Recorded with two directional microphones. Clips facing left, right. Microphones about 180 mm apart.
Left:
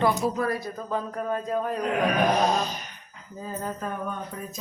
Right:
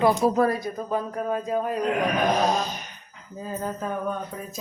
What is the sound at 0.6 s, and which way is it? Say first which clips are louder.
Speech: right 3 dB; 15° right (ahead or behind).